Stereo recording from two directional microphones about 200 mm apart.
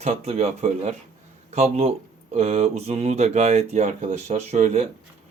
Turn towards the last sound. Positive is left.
turn(degrees=-35)  # may be behind; listen again after turning